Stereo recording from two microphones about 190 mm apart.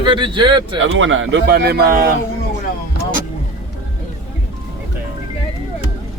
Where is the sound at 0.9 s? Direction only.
90° right; by 2.1 s 50° right (ahead or behind).